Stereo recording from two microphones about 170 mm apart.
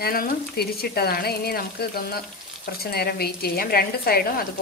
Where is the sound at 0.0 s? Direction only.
60° left (ahead or behind).